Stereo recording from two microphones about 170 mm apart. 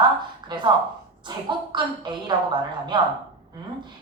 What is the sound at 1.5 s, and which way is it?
Speech, 25° right (ahead or behind).